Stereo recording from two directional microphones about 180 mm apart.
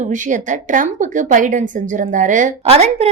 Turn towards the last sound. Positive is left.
turn(degrees=-35)  # may be behind; listen again after turning